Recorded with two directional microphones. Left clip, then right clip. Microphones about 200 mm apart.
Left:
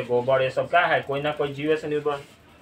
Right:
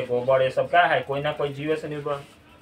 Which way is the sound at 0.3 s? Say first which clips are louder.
Right 2 dB; 25° left (ahead or behind).